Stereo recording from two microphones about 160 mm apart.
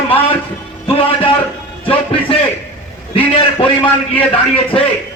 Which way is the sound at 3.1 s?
35° left (ahead or behind).